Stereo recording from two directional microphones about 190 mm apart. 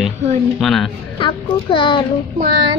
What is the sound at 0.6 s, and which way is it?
Speech, centre (ahead or behind).